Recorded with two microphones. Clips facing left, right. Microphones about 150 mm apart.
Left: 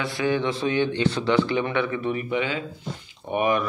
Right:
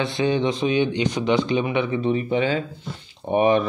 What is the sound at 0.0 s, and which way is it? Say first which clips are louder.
Speech: right 3 dB; 20° right (ahead or behind).